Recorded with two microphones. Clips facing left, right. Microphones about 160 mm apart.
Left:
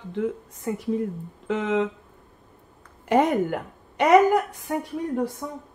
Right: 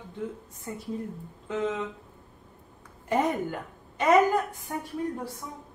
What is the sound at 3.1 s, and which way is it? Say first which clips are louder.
A woman's voice: left 6 dB; 80° left.